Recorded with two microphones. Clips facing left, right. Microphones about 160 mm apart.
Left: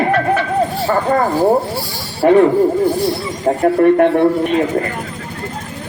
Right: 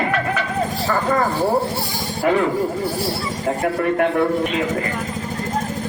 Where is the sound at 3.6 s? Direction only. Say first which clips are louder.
Left 9 dB; 35° left (ahead or behind).